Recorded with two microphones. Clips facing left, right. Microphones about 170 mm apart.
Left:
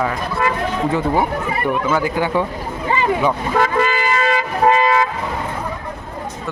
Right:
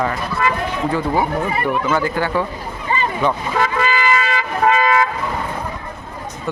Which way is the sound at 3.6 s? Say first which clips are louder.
Left 3 dB; 50° left (ahead or behind).